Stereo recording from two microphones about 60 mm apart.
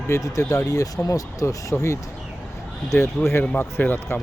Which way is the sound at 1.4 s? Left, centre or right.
Left.